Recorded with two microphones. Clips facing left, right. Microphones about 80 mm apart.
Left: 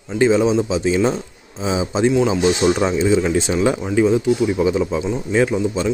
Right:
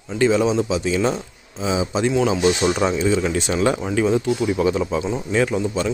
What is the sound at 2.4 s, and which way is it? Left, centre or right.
Speech, centre.